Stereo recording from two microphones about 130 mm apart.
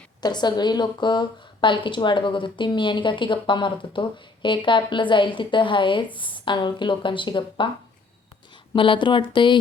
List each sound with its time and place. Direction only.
0.2 s a woman's voice: 35° left (ahead or behind)
8.7 s a woman's voice: 40° left (ahead or behind)